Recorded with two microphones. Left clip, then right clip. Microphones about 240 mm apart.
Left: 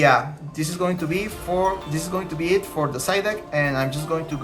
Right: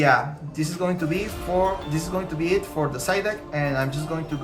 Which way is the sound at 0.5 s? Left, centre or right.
Centre.